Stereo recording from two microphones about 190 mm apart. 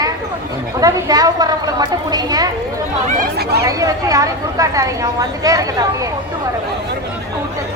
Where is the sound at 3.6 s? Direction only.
20° right (ahead or behind).